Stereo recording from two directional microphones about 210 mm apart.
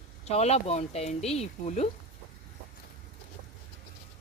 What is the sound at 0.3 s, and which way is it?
Speech, 30° left (ahead or behind).